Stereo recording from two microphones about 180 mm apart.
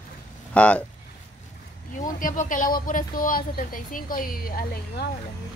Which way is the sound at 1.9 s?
50° left (ahead or behind).